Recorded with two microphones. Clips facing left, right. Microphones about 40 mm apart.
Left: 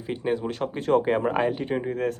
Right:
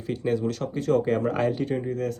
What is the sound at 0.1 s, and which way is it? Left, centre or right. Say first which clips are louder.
Speech: right 1 dB; left.